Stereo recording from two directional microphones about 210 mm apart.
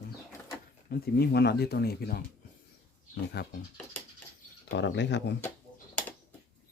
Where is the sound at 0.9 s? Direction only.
50° left (ahead or behind).